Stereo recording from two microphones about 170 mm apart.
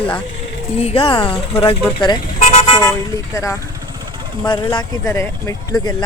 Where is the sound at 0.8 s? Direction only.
35° left (ahead or behind).